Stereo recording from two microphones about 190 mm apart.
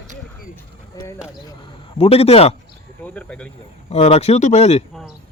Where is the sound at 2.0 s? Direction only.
30° left (ahead or behind).